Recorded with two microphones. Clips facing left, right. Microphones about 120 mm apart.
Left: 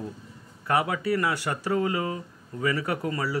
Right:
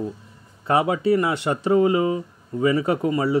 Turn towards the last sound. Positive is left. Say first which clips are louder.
# right 8 dB
turn(degrees=-25)  # may be behind; listen again after turning